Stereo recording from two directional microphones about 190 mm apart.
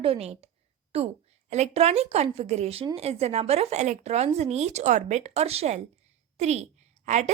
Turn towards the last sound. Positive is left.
turn(degrees=-35)  # may be behind; listen again after turning